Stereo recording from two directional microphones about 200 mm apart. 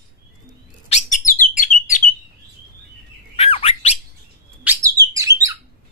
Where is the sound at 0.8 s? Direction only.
35° left (ahead or behind).